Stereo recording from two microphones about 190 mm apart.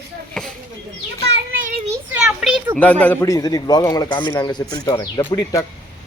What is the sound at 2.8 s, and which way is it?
A man's voice, 10° left (ahead or behind).